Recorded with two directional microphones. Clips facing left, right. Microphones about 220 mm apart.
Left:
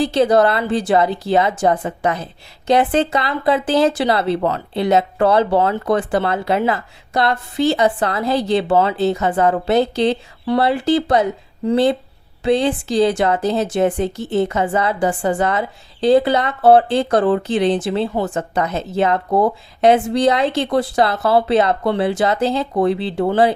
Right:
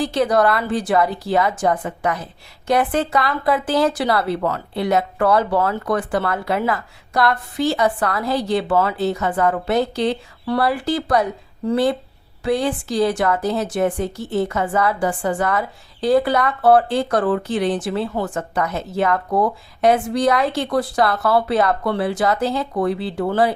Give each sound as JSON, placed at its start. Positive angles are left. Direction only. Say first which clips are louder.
{"t": 0.0, "sound": "speech", "louder": "left 3 dB", "side_deg": 25}